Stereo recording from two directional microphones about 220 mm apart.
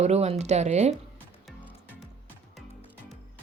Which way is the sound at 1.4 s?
Centre (ahead or behind).